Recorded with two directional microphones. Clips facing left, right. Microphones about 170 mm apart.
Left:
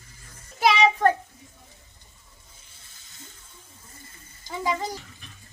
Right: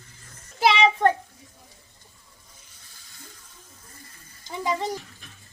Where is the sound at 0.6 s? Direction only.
25° right (ahead or behind).